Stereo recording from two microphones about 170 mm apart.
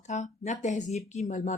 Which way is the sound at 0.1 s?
45° left (ahead or behind).